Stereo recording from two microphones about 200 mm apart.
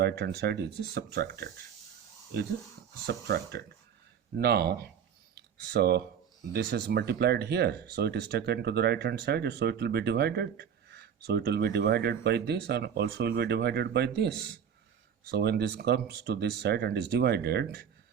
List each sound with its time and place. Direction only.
0.0 s speech: 55° right (ahead or behind)
3.1 s speech: 55° right (ahead or behind)
5.3 s a sound: 55° right (ahead or behind)
6.5 s speech: 55° right (ahead or behind)